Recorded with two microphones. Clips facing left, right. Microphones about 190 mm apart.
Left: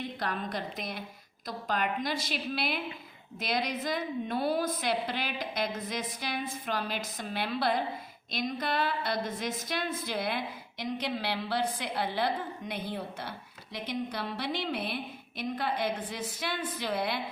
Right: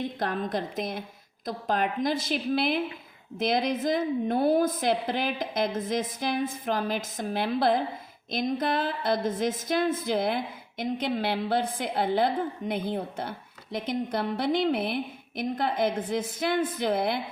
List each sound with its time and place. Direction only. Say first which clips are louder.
0.0 s a woman's voice: right 5 dB; 50° right (ahead or behind)